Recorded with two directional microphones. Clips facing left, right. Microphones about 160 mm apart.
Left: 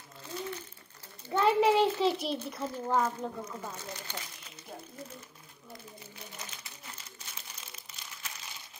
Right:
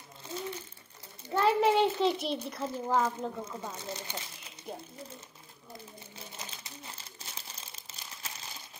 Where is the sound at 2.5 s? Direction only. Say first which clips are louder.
Right 1 dB; centre (ahead or behind).